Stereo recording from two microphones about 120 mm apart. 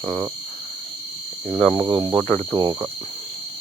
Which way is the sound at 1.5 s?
10° left (ahead or behind).